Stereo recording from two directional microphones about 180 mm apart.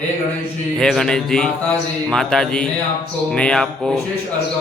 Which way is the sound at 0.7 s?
5° left (ahead or behind).